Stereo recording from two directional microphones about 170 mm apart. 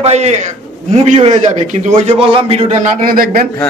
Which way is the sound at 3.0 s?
55° right (ahead or behind).